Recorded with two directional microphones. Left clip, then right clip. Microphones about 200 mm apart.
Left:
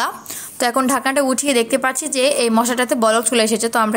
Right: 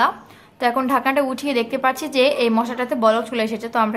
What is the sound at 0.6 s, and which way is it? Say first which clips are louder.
A woman's voice: left 1 dB; 25° left (ahead or behind).